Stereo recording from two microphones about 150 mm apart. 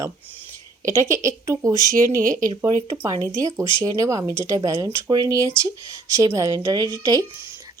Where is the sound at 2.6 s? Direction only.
20° right (ahead or behind).